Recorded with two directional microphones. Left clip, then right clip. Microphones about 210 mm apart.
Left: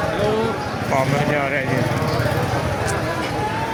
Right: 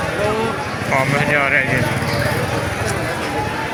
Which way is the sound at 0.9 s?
10° left (ahead or behind).